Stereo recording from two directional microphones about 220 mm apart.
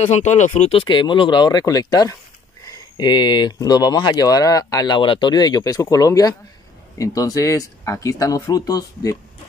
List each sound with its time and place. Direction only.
0.0 s speech: 30° left (ahead or behind)